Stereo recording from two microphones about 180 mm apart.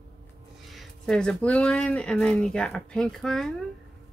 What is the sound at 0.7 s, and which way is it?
Speech, centre (ahead or behind).